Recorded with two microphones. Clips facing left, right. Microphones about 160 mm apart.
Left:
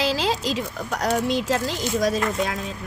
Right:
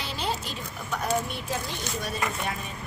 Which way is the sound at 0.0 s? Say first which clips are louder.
Left 9 dB; 90° left.